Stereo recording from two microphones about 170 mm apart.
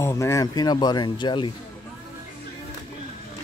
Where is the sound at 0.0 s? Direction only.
15° left (ahead or behind).